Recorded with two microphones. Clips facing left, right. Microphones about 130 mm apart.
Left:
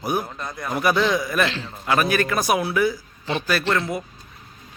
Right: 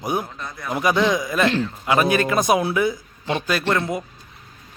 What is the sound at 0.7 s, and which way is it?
A man's voice, 15° right (ahead or behind).